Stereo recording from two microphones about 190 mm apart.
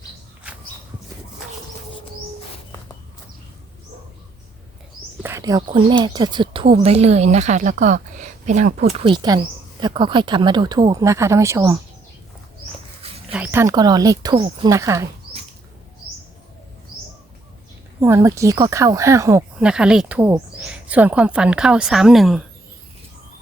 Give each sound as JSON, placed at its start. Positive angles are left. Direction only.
{"t": 5.2, "sound": "speech", "side_deg": -15}
{"t": 13.3, "sound": "speech", "side_deg": -10}
{"t": 14.7, "sound": "speech", "side_deg": -15}
{"t": 18.0, "sound": "speech", "side_deg": -15}